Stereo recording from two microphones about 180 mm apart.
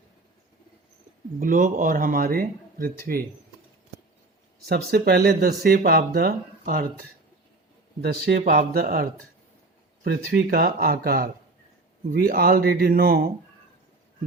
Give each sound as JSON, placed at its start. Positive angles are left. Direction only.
{"t": 1.4, "sound": "a man's voice", "side_deg": -50}
{"t": 4.7, "sound": "speech", "side_deg": -60}
{"t": 8.0, "sound": "speech", "side_deg": -65}